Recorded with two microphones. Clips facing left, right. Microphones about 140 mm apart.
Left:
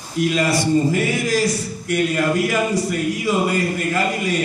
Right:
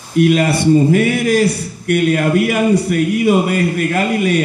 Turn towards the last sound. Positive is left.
turn(degrees=-60)  # may be behind; listen again after turning